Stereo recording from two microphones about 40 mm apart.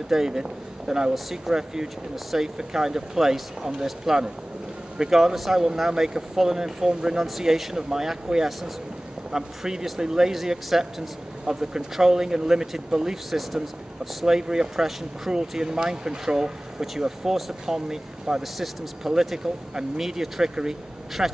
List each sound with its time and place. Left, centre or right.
0.1 s speech: centre
7.2 s speech: centre
14.2 s speech: centre